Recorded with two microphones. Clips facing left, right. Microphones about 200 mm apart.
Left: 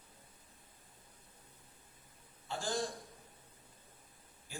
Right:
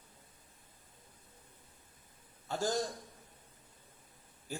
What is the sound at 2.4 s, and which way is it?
Speech, 40° right (ahead or behind).